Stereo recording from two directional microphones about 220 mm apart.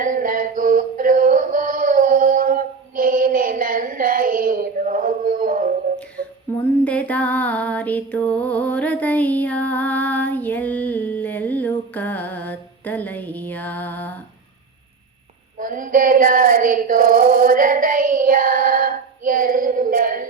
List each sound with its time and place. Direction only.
0.0 s music: 40° right (ahead or behind)
6.6 s female singing: 5° left (ahead or behind)
15.5 s female singing: 40° right (ahead or behind)